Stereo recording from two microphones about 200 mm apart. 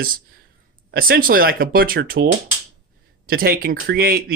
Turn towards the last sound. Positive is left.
turn(degrees=-50)  # may be behind; listen again after turning